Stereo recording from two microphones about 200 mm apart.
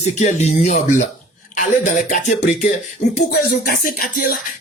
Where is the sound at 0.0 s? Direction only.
35° left (ahead or behind).